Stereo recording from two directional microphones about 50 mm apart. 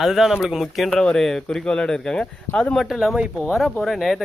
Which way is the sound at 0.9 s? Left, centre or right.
Centre.